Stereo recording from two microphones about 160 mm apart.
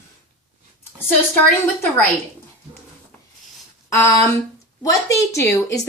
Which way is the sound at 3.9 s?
15° left (ahead or behind).